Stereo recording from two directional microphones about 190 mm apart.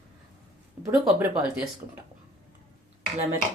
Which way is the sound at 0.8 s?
10° right (ahead or behind).